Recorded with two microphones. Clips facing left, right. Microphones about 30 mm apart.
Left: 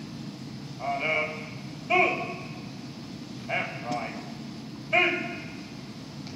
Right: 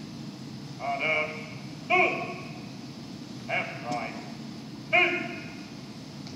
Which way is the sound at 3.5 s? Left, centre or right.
Centre.